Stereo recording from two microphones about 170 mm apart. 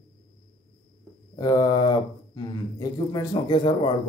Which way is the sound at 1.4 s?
20° left (ahead or behind).